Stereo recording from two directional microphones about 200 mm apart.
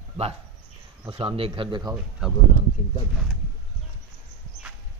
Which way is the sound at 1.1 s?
25° right (ahead or behind).